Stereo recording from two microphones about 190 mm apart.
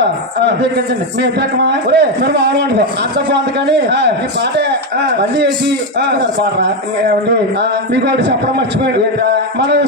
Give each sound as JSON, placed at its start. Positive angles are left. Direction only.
{"t": 0.0, "sound": "a man's voice", "side_deg": -65}
{"t": 7.9, "sound": "a man's voice", "side_deg": -65}